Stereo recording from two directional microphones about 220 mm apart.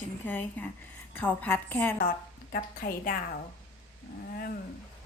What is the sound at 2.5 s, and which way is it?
Speech, 40° left (ahead or behind).